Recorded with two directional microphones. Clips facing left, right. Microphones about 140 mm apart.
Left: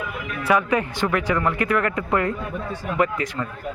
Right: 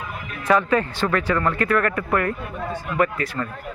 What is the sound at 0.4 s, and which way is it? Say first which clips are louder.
Speech: right 1 dB; 10° left (ahead or behind).